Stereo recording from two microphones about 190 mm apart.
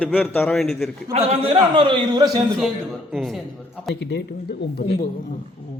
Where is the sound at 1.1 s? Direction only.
30° right (ahead or behind).